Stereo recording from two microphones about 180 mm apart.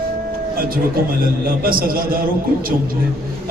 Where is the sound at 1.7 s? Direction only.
55° right (ahead or behind).